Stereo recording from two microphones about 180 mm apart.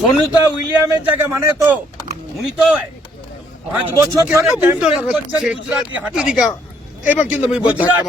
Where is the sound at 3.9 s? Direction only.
15° right (ahead or behind).